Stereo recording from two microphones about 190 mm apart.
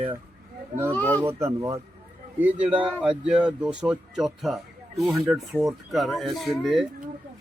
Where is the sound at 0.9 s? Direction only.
10° left (ahead or behind).